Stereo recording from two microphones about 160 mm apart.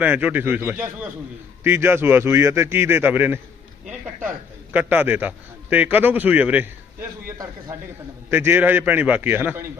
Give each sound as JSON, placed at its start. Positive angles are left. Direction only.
{"t": 0.0, "sound": "a man's voice", "side_deg": -10}
{"t": 4.7, "sound": "a man's voice", "side_deg": -10}